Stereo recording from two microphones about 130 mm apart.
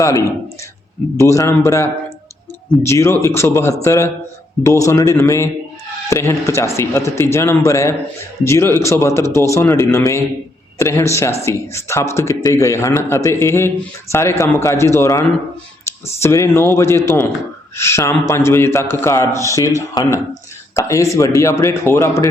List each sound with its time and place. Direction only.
0.0 s a man's voice: 25° left (ahead or behind)
16.2 s a man's voice: 20° left (ahead or behind)